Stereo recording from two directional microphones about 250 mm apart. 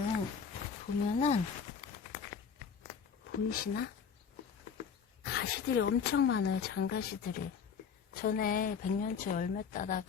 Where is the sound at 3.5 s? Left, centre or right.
Left.